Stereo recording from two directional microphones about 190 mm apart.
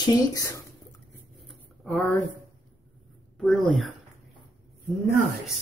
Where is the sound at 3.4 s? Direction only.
Centre (ahead or behind).